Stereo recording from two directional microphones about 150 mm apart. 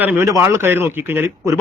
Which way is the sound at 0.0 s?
15° right (ahead or behind).